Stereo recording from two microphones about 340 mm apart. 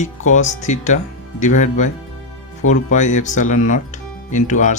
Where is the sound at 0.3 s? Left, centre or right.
Left.